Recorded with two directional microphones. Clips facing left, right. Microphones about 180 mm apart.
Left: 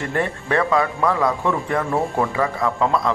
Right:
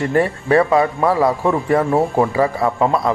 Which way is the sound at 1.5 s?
20° right (ahead or behind).